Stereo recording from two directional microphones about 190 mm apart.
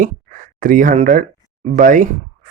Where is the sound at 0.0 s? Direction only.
45° right (ahead or behind).